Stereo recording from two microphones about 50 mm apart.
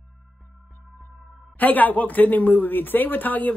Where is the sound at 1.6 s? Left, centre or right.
Left.